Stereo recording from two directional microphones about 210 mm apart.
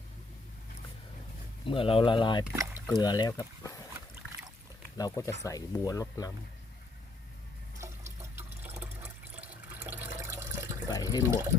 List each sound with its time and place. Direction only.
1.6 s speech: 25° left (ahead or behind)
2.4 s speech: 10° right (ahead or behind)
3.0 s speech: 20° left (ahead or behind)
4.9 s speech: 15° left (ahead or behind)
7.8 s water: 15° right (ahead or behind)
10.9 s water: 20° left (ahead or behind)
11.3 s speech: 15° right (ahead or behind)